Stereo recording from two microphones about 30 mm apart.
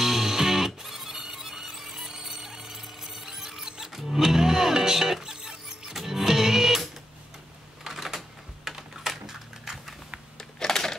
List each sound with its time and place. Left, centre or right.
0.0 s music: centre
7.8 s typing: centre
9.2 s a sound: centre
10.3 s typing: centre